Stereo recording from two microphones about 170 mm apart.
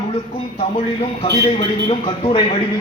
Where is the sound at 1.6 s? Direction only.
30° left (ahead or behind).